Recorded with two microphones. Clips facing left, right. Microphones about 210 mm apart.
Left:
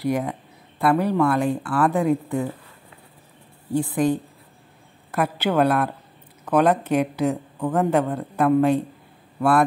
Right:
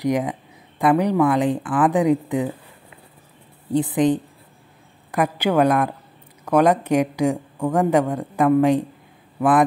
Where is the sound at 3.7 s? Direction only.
20° right (ahead or behind).